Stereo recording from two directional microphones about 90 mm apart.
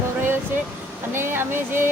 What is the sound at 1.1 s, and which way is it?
Speech, 25° right (ahead or behind).